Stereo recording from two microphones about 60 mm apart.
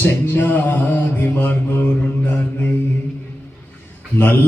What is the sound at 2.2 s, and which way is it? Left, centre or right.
Mantra, left.